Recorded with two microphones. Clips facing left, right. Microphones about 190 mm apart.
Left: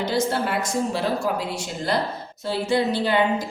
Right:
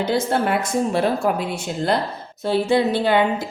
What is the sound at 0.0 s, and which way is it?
A woman's voice, 55° right (ahead or behind).